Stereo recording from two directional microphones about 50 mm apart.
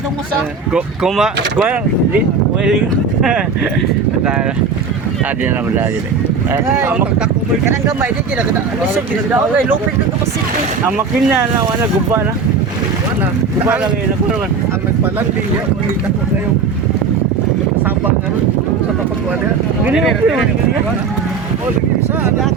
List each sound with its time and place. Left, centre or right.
0.7 s speech: centre
6.5 s speech: right
19.9 s speech: centre